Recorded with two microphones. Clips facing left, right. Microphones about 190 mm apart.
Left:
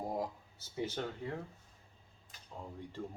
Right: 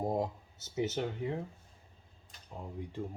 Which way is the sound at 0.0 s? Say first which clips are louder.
Right 5 dB; 25° right (ahead or behind).